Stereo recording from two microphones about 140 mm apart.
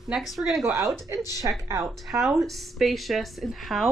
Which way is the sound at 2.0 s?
Centre (ahead or behind).